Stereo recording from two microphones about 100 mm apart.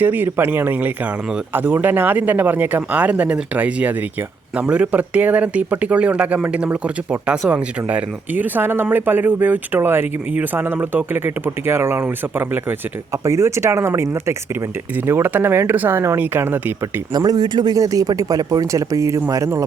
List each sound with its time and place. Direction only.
0.0 s speech: 20° right (ahead or behind)
16.8 s speech: 40° right (ahead or behind)